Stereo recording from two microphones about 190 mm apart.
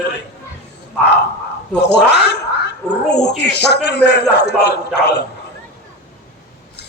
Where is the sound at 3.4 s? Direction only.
60° left (ahead or behind).